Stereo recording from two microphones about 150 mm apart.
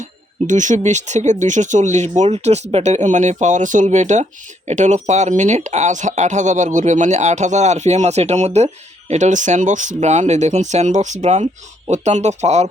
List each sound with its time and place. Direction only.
0.4 s speech: 55° right (ahead or behind)